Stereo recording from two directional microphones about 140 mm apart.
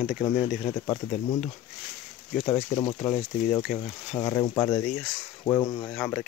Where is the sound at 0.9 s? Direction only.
35° left (ahead or behind).